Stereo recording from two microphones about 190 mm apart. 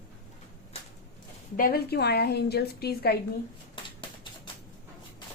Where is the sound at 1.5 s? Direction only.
50° left (ahead or behind).